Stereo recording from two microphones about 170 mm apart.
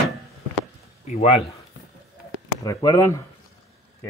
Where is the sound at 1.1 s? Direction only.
35° left (ahead or behind).